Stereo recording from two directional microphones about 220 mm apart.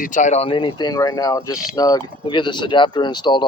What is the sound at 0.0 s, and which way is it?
Speech, 35° left (ahead or behind).